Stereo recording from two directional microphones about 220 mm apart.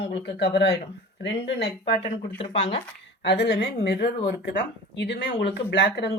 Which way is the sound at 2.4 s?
25° left (ahead or behind).